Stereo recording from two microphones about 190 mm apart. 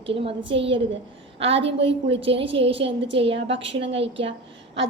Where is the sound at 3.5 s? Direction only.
70° right (ahead or behind).